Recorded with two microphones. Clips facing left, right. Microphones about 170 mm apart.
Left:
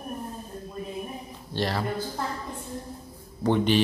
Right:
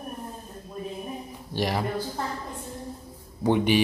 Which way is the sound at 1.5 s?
15° right (ahead or behind).